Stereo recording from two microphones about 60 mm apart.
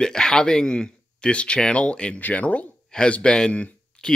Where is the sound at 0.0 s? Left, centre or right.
Centre.